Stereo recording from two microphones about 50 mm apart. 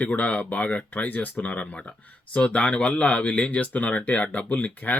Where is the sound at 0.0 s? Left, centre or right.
Left.